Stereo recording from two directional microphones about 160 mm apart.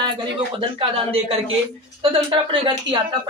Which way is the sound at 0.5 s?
35° right (ahead or behind).